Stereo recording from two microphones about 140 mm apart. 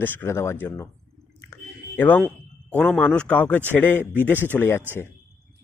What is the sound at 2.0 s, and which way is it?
A man's voice, 10° left (ahead or behind).